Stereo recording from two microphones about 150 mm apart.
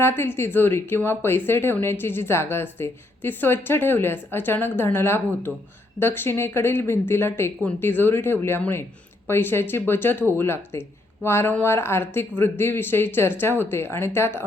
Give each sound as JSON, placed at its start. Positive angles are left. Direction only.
{"t": 0.0, "sound": "speech", "side_deg": 15}